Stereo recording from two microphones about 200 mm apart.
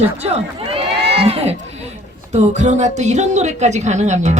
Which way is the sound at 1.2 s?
30° right (ahead or behind).